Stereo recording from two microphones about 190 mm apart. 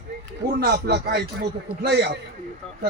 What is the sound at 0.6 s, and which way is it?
A man's voice, 55° right (ahead or behind).